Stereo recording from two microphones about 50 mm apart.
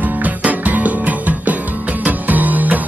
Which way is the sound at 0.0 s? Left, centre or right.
Right.